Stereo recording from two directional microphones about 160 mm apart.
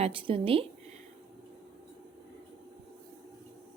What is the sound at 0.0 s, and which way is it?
Speech, 35° right (ahead or behind).